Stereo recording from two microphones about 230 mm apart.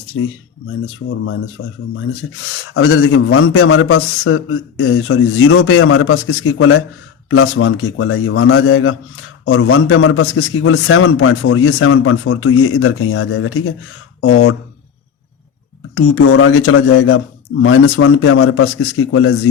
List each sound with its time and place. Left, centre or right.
2.2 s speech: left
2.7 s a man's voice: left
16.0 s a man's voice: left